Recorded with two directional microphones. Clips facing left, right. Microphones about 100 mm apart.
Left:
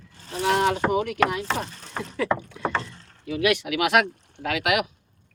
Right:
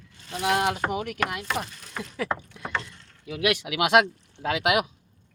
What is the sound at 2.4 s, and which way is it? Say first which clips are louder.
Rowboat: left 9 dB; 85° left.